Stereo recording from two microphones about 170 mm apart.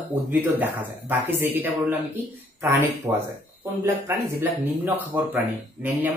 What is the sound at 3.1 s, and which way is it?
Speech, 15° right (ahead or behind).